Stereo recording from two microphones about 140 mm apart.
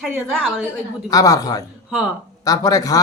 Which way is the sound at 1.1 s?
25° left (ahead or behind).